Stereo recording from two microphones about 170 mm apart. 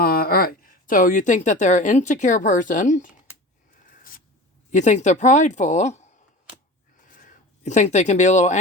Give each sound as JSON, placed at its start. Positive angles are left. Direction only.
{"t": 0.0, "sound": "a woman's voice", "side_deg": 60}
{"t": 4.7, "sound": "speech", "side_deg": 45}